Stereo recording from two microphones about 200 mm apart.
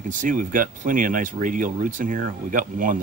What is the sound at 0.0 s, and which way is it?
Speech, 40° right (ahead or behind).